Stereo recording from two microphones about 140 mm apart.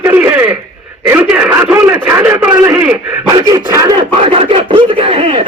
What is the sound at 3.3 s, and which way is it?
Speech, 25° right (ahead or behind).